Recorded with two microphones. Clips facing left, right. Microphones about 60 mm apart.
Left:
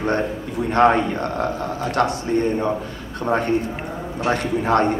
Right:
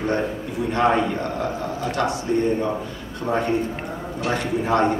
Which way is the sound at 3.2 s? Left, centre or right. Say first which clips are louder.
Left 2 dB; left.